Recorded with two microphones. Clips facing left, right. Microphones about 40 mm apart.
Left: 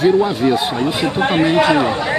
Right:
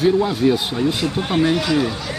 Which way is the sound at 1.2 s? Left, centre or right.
Left.